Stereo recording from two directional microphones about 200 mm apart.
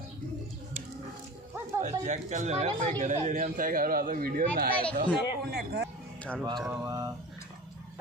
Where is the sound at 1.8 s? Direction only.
35° right (ahead or behind).